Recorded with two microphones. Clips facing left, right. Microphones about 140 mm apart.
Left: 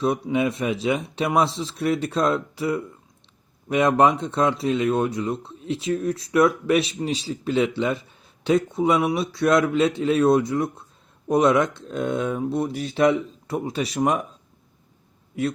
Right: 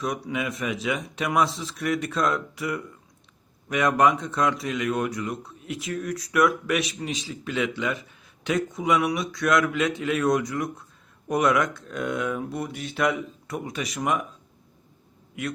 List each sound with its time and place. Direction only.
0.0 s speech: 30° left (ahead or behind)